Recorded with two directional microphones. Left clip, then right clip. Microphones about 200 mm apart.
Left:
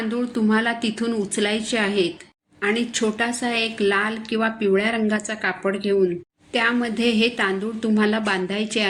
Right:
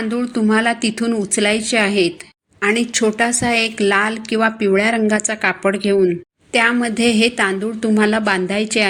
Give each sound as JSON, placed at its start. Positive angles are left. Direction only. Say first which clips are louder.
{"t": 0.1, "sound": "a woman's voice", "louder": "right 5 dB", "side_deg": -30}